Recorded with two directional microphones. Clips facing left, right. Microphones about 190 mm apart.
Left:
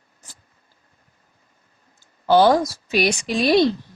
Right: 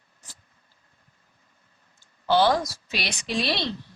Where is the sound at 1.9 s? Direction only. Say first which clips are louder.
Left 6 dB; 45° left (ahead or behind).